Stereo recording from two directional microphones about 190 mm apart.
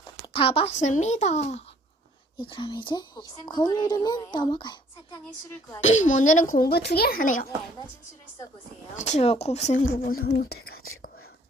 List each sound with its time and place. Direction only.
0.3 s a woman's voice: 30° left (ahead or behind)
5.8 s speech: 40° left (ahead or behind)
9.0 s speech: 40° left (ahead or behind)
10.2 s speech: 55° left (ahead or behind)